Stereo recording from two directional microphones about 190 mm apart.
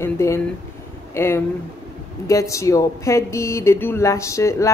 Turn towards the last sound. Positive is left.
turn(degrees=15)  # may be behind; listen again after turning